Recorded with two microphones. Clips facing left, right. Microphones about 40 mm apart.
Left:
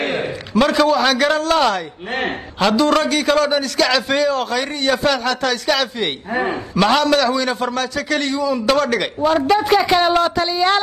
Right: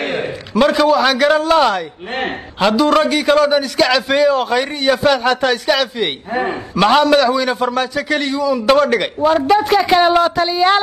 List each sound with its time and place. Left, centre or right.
0.6 s a man's voice: centre
5.2 s speech: right
5.7 s a man's voice: centre
8.6 s a man's voice: centre